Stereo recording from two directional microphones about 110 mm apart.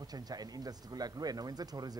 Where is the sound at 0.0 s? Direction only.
35° right (ahead or behind).